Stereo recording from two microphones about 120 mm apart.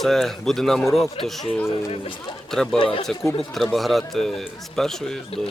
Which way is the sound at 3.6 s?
Centre (ahead or behind).